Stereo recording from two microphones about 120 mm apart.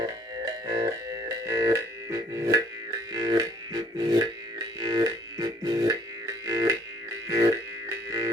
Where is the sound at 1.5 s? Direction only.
30° right (ahead or behind).